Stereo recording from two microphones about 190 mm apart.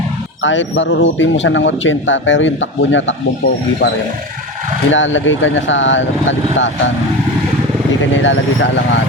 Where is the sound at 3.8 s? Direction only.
65° left (ahead or behind).